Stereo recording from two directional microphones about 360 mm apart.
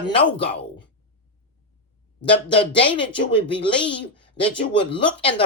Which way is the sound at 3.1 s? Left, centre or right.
Centre.